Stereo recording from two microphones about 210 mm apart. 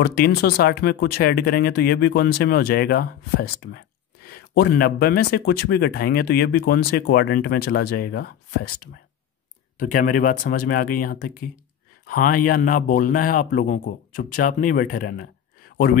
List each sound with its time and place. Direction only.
0.0 s a man's voice: 50° left (ahead or behind)